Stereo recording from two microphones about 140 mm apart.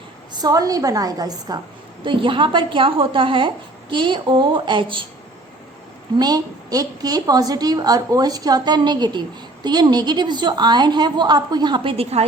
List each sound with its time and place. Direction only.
0.3 s a woman's voice: 25° right (ahead or behind)
2.0 s a woman's voice: 35° right (ahead or behind)
6.1 s a woman's voice: 30° right (ahead or behind)